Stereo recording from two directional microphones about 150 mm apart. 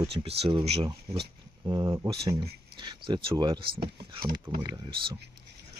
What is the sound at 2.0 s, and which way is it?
Speech, 35° right (ahead or behind).